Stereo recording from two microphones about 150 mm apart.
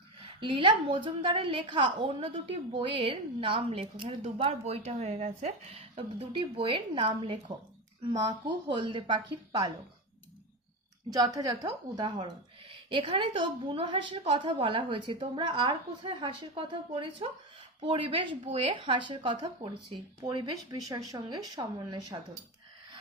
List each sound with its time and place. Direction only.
0.3 s a woman's voice: 35° right (ahead or behind)
11.1 s a woman's voice: 25° right (ahead or behind)